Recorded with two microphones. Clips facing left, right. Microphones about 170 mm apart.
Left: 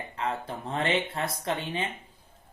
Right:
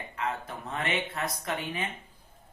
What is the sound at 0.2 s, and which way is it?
Speech, 30° left (ahead or behind).